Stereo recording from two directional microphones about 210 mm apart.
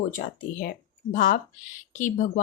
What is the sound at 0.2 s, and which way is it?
Speech, 40° left (ahead or behind).